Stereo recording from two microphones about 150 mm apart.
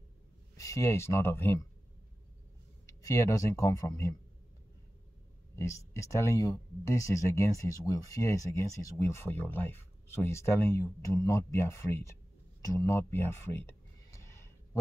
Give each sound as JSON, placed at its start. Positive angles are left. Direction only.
{"t": 0.6, "sound": "speech", "side_deg": 20}
{"t": 3.0, "sound": "speech", "side_deg": 20}
{"t": 5.6, "sound": "speech", "side_deg": 20}